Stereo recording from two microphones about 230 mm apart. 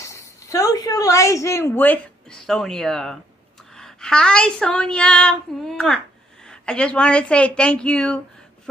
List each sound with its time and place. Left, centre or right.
0.0 s a woman's voice: centre